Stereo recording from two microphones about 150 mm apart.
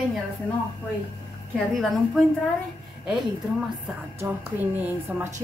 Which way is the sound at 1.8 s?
Centre (ahead or behind).